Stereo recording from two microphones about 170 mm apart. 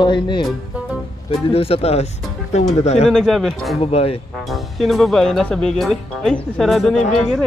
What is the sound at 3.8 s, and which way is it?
Speech, 35° left (ahead or behind).